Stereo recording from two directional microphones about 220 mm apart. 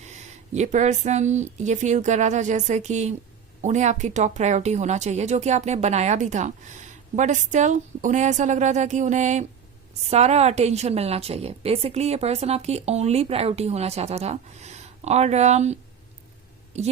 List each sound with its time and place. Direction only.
0.0 s a woman's voice: 30° right (ahead or behind)